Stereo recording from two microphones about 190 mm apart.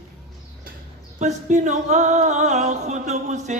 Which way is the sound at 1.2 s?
35° right (ahead or behind).